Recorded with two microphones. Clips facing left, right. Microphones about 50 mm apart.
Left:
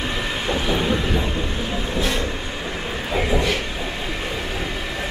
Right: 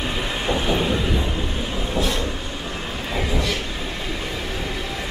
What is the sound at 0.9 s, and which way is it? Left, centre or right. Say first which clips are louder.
Speech: left 1 dB; centre.